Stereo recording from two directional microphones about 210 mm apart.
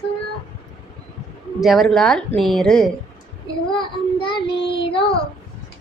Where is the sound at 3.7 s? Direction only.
25° left (ahead or behind).